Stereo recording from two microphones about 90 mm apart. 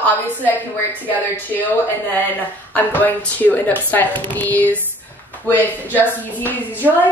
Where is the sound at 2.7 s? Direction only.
20° left (ahead or behind).